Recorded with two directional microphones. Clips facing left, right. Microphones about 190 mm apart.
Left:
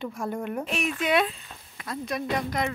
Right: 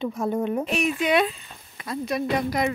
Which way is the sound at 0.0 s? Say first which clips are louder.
Right 6 dB; 20° right (ahead or behind).